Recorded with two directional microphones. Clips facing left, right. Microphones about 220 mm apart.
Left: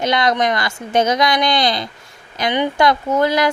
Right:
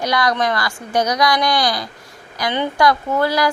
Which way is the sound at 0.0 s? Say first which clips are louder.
Left 2 dB; 25° left (ahead or behind).